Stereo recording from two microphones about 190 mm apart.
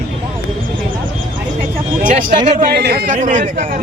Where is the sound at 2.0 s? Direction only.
45° right (ahead or behind).